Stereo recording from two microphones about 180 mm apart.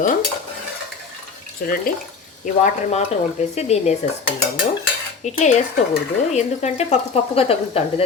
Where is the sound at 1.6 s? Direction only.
55° left (ahead or behind).